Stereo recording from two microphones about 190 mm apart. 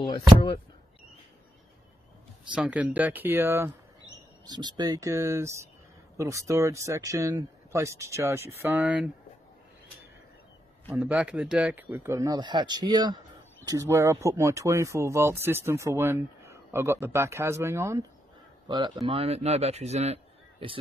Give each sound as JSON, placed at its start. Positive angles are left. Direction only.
{"t": 2.5, "sound": "speech", "side_deg": -5}
{"t": 4.5, "sound": "speech", "side_deg": -20}
{"t": 10.9, "sound": "speech", "side_deg": -5}